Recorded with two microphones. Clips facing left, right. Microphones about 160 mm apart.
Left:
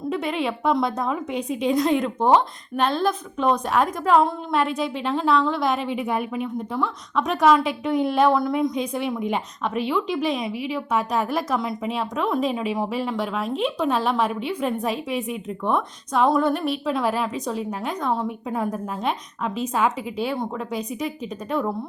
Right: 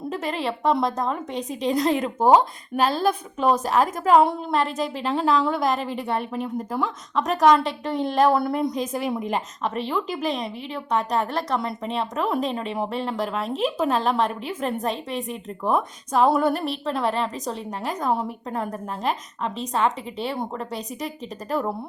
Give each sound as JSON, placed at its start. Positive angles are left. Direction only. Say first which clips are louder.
{"t": 0.1, "sound": "speech", "louder": "left 2 dB", "side_deg": 0}